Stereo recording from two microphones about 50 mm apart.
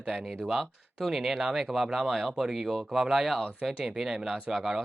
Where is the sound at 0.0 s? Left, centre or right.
Centre.